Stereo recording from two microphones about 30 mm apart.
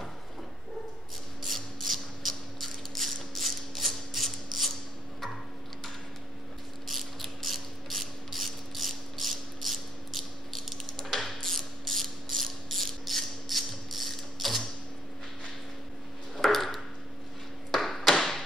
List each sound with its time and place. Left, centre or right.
1.4 s a sound: centre
6.9 s mechanisms: centre
16.3 s ping: centre
17.6 s tap: centre
18.1 s thump: centre